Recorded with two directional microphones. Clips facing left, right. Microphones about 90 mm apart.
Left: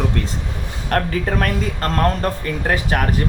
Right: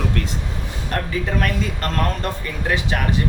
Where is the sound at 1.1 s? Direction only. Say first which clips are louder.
Left 2 dB; 45° left (ahead or behind).